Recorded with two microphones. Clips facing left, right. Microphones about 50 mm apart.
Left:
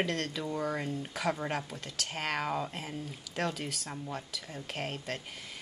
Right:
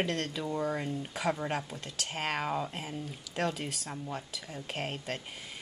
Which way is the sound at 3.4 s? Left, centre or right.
Centre.